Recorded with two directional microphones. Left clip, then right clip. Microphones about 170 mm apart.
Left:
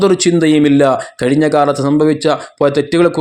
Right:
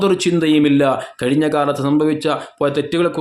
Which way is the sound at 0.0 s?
25° left (ahead or behind).